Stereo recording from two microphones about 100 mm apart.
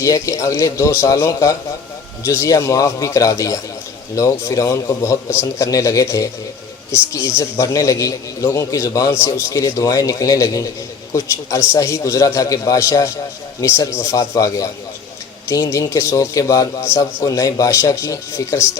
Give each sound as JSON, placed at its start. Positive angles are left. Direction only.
{"t": 0.0, "sound": "a man's voice", "side_deg": 35}